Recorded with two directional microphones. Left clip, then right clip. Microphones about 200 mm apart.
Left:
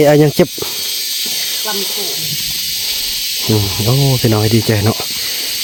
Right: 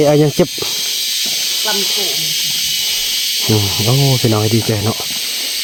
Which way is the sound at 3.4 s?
15° left (ahead or behind).